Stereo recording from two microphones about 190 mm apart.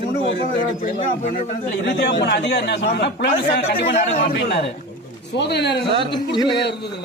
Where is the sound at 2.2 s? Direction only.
60° left (ahead or behind).